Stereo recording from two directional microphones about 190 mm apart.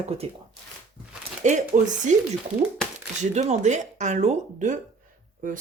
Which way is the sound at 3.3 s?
35° right (ahead or behind).